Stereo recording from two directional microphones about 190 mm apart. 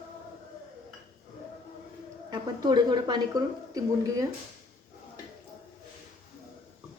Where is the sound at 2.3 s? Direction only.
20° right (ahead or behind).